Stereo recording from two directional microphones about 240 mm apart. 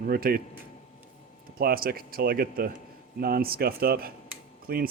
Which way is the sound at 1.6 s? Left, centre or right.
Right.